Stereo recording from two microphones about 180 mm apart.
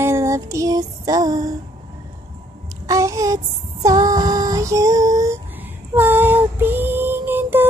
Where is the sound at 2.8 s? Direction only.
20° right (ahead or behind).